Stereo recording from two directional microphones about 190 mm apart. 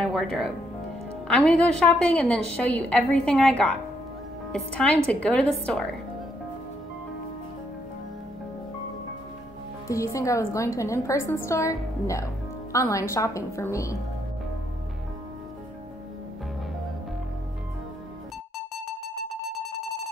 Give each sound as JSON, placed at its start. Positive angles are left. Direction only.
{"t": 0.0, "sound": "music", "side_deg": 0}
{"t": 1.2, "sound": "a woman's voice", "side_deg": 5}
{"t": 9.8, "sound": "a woman's voice", "side_deg": 15}
{"t": 19.2, "sound": "a sound", "side_deg": 0}